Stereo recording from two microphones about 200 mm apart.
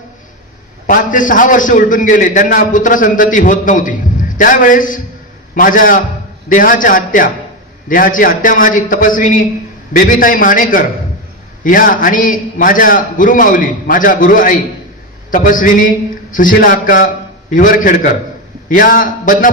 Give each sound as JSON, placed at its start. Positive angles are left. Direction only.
{"t": 0.8, "sound": "a man's voice", "side_deg": 40}